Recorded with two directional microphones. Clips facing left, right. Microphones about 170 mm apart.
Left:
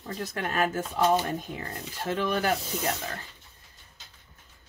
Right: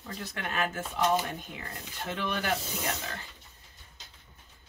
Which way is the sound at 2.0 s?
40° left (ahead or behind).